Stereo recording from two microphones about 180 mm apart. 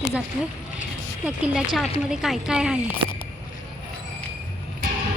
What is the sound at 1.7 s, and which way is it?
Speech, centre (ahead or behind).